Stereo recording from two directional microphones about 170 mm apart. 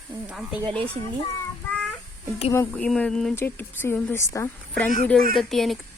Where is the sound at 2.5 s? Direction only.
10° left (ahead or behind).